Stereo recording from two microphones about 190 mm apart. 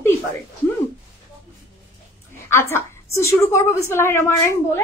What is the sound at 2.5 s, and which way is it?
A woman's voice, 15° left (ahead or behind).